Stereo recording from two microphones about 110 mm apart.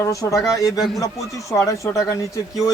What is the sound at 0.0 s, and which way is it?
Speech, 30° left (ahead or behind).